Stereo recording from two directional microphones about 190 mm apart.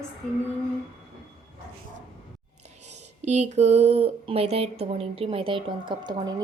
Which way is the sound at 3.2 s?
35° right (ahead or behind).